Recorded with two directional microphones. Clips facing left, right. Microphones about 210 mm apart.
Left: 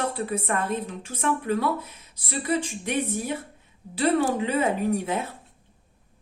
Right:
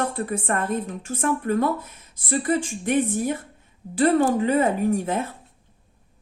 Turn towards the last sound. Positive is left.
turn(degrees=-45)  # may be behind; listen again after turning